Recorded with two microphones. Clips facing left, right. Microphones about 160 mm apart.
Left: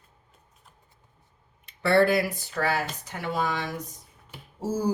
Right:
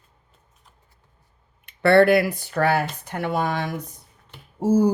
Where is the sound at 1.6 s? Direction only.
65° right (ahead or behind).